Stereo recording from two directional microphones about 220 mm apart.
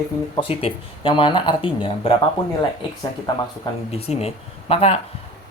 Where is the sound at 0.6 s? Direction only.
25° left (ahead or behind).